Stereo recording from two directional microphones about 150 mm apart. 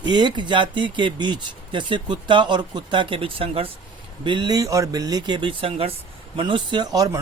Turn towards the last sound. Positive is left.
turn(degrees=-25)  # may be behind; listen again after turning